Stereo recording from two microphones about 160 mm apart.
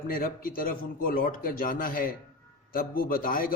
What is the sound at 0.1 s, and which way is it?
A man's voice, 65° left (ahead or behind).